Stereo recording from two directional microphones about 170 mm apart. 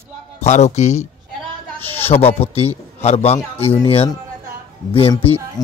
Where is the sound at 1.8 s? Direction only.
10° left (ahead or behind).